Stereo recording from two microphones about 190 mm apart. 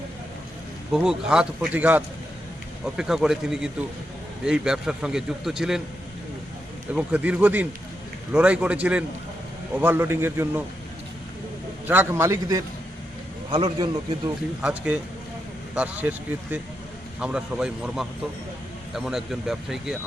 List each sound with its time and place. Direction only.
0.9 s speech: 5° right (ahead or behind)
6.9 s a man's voice: 10° right (ahead or behind)
11.9 s a man's voice: 10° right (ahead or behind)
14.6 s a man's voice: 5° right (ahead or behind)